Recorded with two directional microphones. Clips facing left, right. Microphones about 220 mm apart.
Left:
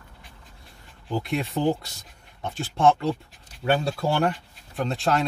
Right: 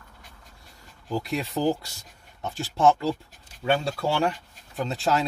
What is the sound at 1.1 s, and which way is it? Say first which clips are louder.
Speech: left 1 dB; centre (ahead or behind).